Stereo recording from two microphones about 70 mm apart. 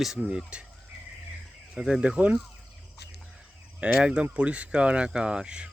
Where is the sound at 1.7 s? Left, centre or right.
Centre.